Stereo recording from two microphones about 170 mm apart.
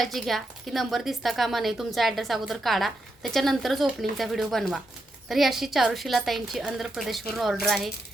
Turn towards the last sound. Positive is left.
turn(degrees=0)  # may be behind; listen again after turning